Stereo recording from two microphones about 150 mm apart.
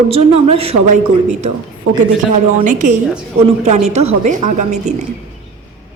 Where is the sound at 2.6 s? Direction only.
55° right (ahead or behind).